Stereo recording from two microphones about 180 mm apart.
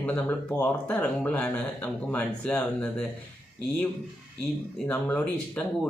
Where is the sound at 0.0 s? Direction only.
10° left (ahead or behind).